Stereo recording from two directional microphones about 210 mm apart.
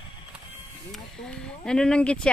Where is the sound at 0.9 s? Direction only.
5° left (ahead or behind).